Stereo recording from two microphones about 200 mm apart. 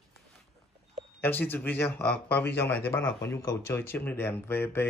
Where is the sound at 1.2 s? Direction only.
10° left (ahead or behind).